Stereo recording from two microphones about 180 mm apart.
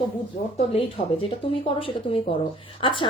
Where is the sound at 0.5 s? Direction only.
35° left (ahead or behind).